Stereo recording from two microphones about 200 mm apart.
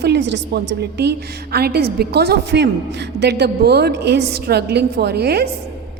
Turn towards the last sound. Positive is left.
turn(degrees=-50)  # may be behind; listen again after turning